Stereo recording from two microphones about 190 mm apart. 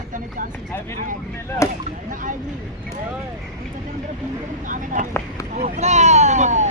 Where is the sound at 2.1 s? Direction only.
45° right (ahead or behind).